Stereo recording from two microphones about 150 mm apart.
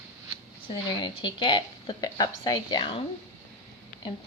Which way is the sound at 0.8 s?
30° left (ahead or behind).